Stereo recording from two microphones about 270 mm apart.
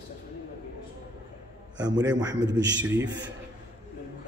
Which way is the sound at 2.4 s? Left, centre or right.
Right.